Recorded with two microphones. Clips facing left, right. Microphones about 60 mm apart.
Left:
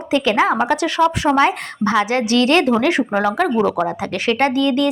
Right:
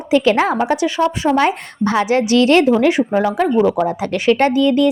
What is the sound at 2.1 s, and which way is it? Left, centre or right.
Speech, left.